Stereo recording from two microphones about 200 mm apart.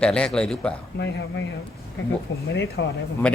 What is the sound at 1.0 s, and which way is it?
Speech, 60° left (ahead or behind).